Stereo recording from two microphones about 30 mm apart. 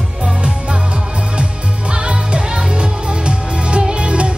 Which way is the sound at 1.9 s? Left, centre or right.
Right.